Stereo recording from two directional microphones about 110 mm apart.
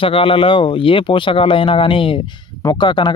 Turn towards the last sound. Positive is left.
turn(degrees=45)  # may be behind; listen again after turning